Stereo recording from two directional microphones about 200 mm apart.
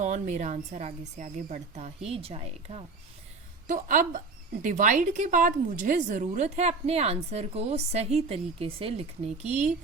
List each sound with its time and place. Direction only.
0.0 s a woman's voice: 35° right (ahead or behind)